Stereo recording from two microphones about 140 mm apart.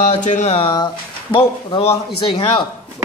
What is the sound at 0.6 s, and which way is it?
A man's voice, 35° left (ahead or behind).